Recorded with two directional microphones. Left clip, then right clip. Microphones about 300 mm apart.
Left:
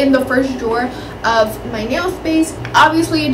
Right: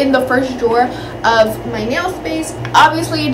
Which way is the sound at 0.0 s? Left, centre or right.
Centre.